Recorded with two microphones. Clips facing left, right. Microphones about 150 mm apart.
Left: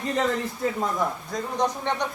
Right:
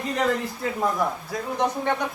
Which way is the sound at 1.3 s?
5° right (ahead or behind).